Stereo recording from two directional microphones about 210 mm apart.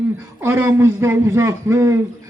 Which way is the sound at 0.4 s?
10° right (ahead or behind).